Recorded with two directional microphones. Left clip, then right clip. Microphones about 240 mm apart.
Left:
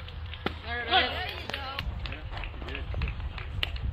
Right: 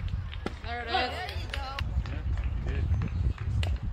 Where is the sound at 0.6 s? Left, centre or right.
Right.